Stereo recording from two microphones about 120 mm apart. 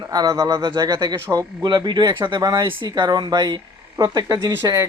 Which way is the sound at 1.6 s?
40° right (ahead or behind).